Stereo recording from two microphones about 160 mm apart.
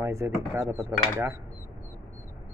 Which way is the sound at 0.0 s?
20° right (ahead or behind).